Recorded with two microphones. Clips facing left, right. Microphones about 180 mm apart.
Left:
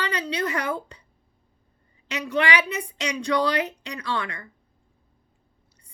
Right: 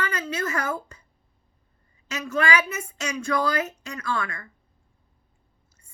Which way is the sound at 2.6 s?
35° left (ahead or behind).